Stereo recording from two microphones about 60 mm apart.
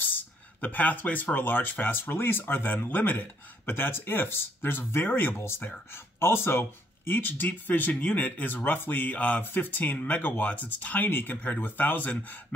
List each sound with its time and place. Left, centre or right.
0.0 s speech: left